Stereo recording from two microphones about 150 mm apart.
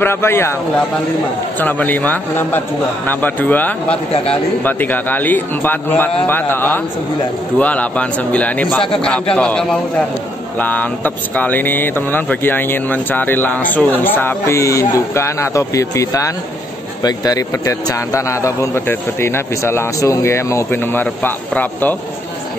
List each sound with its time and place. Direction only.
0.0 s speech: 15° left (ahead or behind)
1.6 s speech: 10° left (ahead or behind)
4.1 s a man's voice: 40° left (ahead or behind)
4.6 s a man's voice: 10° left (ahead or behind)